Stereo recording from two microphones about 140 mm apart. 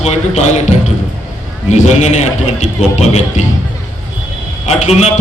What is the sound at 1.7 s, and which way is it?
Speech, 55° left (ahead or behind).